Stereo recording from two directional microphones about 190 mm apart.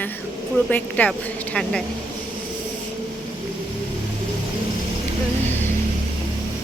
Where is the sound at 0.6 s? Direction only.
10° left (ahead or behind).